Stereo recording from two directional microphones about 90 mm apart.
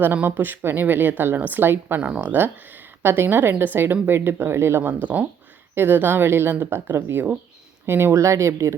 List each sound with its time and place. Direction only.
0.0 s a woman's voice: 20° right (ahead or behind)